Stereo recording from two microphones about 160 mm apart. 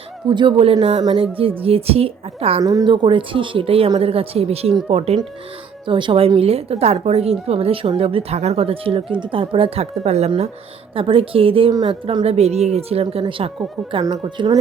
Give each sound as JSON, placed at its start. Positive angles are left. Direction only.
{"t": 0.3, "sound": "a woman's voice", "side_deg": -30}
{"t": 2.6, "sound": "a woman's voice", "side_deg": -25}